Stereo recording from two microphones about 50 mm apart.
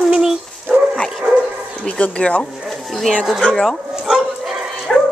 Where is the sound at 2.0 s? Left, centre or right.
Left.